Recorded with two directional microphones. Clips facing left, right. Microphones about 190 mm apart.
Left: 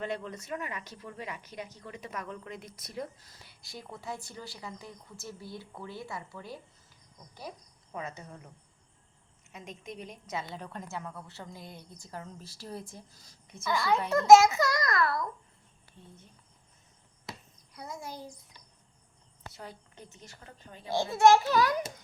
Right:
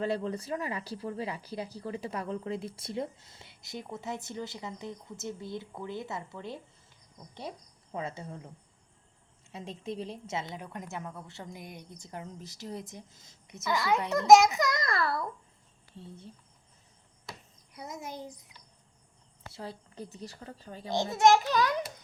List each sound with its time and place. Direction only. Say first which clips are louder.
0.0 s a woman's voice: right 5 dB; 35° right (ahead or behind)
9.5 s a woman's voice: right 5 dB; 30° right (ahead or behind)
10.6 s a woman's voice: even; 15° right (ahead or behind); by 15.3 s 30° right (ahead or behind)
17.7 s a woman's voice: right 1 dB; 20° right (ahead or behind)
19.5 s a woman's voice: right 6 dB; 30° right (ahead or behind)
20.9 s a child's voice: left 1 dB; 20° right (ahead or behind)